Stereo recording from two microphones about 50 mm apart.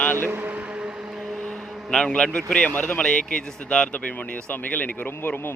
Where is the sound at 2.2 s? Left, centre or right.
Left.